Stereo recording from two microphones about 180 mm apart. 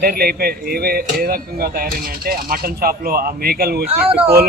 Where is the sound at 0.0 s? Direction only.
55° right (ahead or behind).